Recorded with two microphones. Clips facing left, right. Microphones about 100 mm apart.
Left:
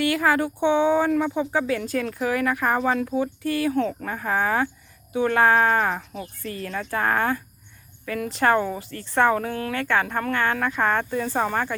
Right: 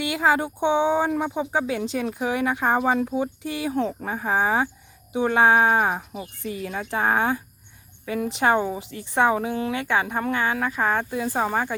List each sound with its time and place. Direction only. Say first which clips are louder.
0.0 s speech: left 1 dB; 20° right (ahead or behind)